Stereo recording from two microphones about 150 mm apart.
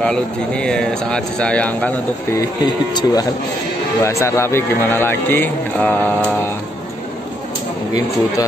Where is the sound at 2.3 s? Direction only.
30° left (ahead or behind); by 6.3 s 10° left (ahead or behind).